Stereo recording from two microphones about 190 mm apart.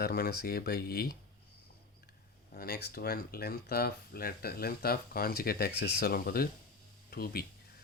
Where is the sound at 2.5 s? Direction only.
50° left (ahead or behind).